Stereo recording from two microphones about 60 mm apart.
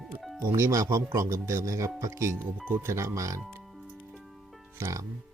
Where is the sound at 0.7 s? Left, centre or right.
Right.